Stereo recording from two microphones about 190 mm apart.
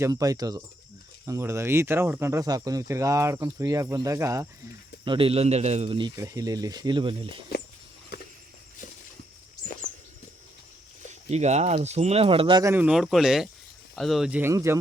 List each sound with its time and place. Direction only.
0.0 s speech: 20° right (ahead or behind)
5.0 s speech: 30° right (ahead or behind)
11.1 s speech: 35° right (ahead or behind)
12.7 s speech: 5° right (ahead or behind)